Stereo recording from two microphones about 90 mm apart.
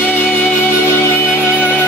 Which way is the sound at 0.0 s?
20° left (ahead or behind).